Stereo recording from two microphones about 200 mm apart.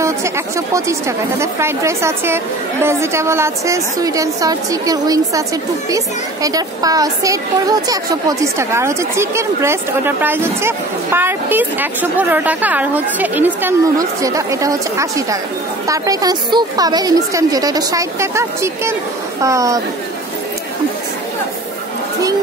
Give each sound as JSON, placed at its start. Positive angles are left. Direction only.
{"t": 0.0, "sound": "a woman's voice", "side_deg": -15}